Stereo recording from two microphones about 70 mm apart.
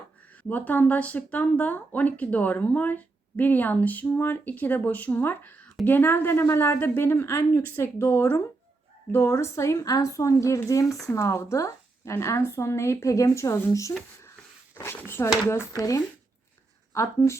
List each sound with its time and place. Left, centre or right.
0.4 s a woman's voice: left
14.8 s a woman's voice: left